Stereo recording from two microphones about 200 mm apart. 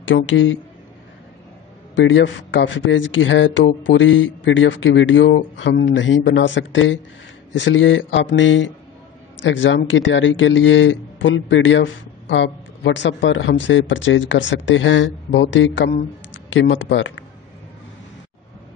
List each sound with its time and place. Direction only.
0.0 s speech: 70° left (ahead or behind)
2.0 s speech: 65° left (ahead or behind)